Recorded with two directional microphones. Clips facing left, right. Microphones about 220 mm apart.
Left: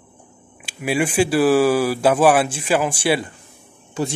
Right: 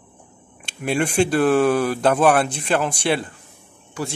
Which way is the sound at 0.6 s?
5° left (ahead or behind).